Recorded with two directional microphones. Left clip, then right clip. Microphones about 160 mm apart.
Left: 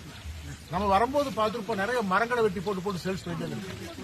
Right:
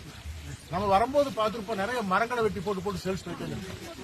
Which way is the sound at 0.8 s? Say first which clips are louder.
Right 1 dB; 15° right (ahead or behind).